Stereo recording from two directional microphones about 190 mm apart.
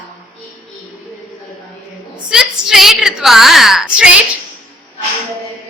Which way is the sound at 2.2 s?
Centre (ahead or behind).